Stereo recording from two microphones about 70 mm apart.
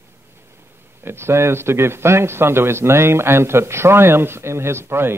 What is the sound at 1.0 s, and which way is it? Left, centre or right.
A man's voice, right.